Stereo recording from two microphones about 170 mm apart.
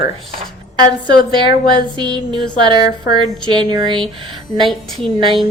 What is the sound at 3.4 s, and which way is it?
A woman's voice, 25° right (ahead or behind).